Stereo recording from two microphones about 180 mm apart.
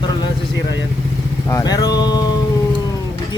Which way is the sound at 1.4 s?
20° left (ahead or behind).